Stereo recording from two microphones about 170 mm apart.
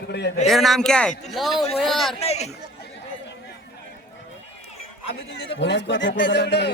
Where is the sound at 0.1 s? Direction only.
75° left (ahead or behind).